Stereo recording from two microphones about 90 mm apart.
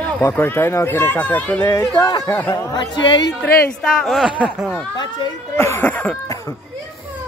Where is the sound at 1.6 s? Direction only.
40° left (ahead or behind); by 3.2 s 60° left (ahead or behind).